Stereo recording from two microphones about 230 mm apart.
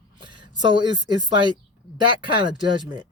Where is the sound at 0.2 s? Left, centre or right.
Right.